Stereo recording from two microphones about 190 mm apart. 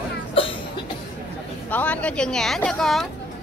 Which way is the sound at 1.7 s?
5° left (ahead or behind).